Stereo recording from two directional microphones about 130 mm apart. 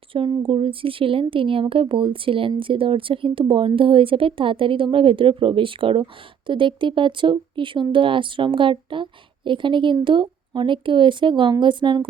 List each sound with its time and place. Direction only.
0.1 s speech: 45° right (ahead or behind)